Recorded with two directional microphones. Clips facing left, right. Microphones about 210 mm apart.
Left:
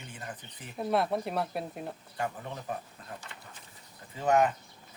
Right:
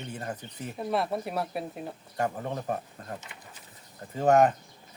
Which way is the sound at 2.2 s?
45° right (ahead or behind).